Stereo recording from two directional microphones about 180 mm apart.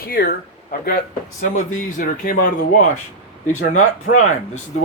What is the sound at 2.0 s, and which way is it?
Speech, 50° left (ahead or behind).